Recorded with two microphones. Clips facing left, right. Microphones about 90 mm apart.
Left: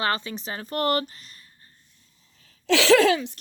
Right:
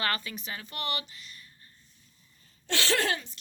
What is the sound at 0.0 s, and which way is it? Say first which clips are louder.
Speech: left 6 dB; 25° left (ahead or behind).